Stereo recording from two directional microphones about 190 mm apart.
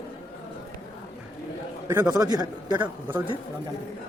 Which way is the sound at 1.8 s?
15° right (ahead or behind).